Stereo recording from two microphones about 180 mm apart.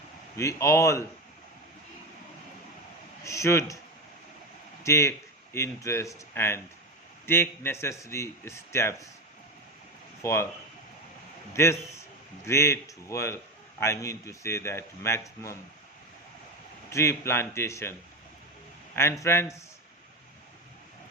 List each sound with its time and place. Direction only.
0.3 s a man's voice: 15° left (ahead or behind)
3.2 s a man's voice: 15° left (ahead or behind)
4.8 s a man's voice: 15° left (ahead or behind)
10.2 s a man's voice: 15° left (ahead or behind)
11.5 s a man's voice: 15° left (ahead or behind)
16.9 s a man's voice: 15° left (ahead or behind)
18.9 s a man's voice: 15° left (ahead or behind)